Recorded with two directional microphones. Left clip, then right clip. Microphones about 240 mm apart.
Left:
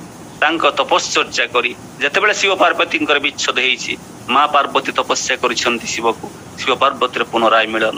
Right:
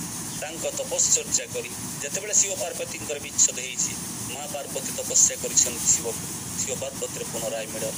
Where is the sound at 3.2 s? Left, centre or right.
Centre.